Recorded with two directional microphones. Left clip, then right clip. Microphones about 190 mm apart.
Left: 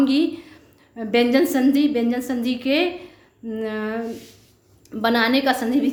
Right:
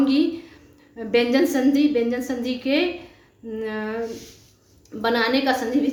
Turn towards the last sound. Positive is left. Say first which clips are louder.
# left 1 dB
turn(degrees=40)  # may be behind; listen again after turning